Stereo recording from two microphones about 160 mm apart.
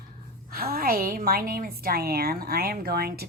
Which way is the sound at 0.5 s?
65° right (ahead or behind).